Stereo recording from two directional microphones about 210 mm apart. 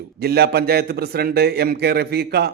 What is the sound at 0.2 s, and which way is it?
A man's voice, 50° right (ahead or behind).